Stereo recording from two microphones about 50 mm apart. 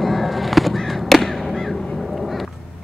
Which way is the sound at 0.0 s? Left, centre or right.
Centre.